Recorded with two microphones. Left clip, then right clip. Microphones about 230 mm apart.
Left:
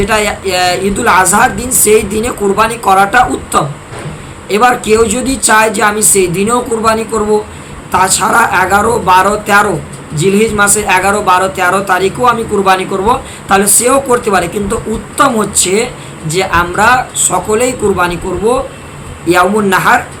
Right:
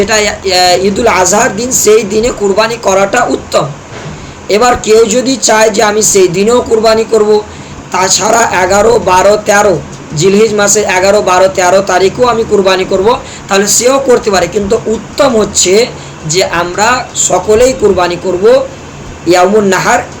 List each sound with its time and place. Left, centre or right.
0.0 s speech: centre
19.3 s speech: centre